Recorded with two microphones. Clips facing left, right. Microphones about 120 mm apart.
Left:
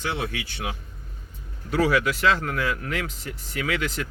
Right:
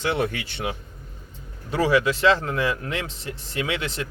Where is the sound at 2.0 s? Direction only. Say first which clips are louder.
Right 3 dB; 25° right (ahead or behind).